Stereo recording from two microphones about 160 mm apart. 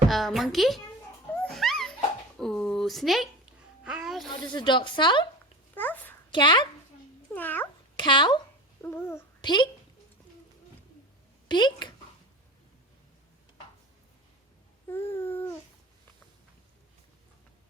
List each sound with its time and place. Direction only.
0.1 s a child's voice: centre (ahead or behind)
1.4 s music: 5° left (ahead or behind)
2.4 s a sound: centre (ahead or behind)
3.8 s a child's voice: 5° right (ahead or behind)
4.3 s speech: 25° left (ahead or behind)
5.7 s a sound: 10° left (ahead or behind)
6.3 s speech: 30° left (ahead or behind)
7.3 s babbling: 10° left (ahead or behind)
7.9 s speech: 30° left (ahead or behind)
8.8 s babbling: 15° left (ahead or behind)
9.4 s a woman's voice: 30° left (ahead or behind)
11.4 s speech: 30° left (ahead or behind)
14.8 s a sound: 15° left (ahead or behind)